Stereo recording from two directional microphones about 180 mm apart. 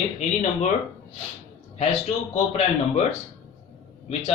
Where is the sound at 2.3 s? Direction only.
35° left (ahead or behind).